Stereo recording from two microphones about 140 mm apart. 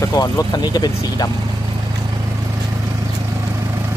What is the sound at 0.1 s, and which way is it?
Speech, 30° left (ahead or behind).